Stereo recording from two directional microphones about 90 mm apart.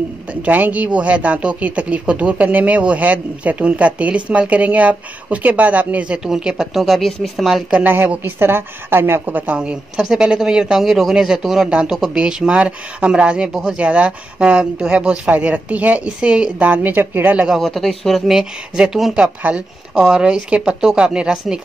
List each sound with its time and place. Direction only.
0.3 s a woman's voice: 15° right (ahead or behind); by 7.6 s centre (ahead or behind)
7.7 s a woman's voice: 20° right (ahead or behind)
17.5 s a woman's voice: centre (ahead or behind)